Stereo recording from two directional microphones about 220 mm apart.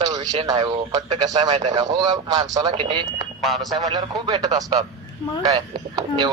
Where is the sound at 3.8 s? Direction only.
15° right (ahead or behind).